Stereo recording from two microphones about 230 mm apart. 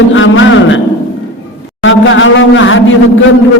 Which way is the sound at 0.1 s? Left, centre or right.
Left.